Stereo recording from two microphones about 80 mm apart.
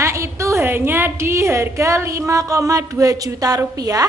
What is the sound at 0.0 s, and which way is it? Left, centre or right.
A woman's voice, right.